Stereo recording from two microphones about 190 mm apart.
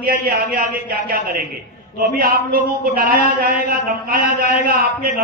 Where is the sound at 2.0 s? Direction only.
45° right (ahead or behind).